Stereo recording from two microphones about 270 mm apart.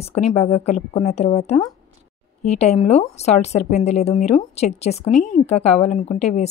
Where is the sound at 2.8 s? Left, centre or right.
Left.